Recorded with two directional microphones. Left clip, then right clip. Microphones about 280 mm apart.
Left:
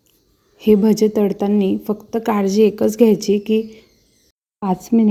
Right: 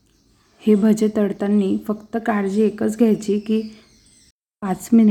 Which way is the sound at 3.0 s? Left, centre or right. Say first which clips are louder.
Left 5 dB; centre.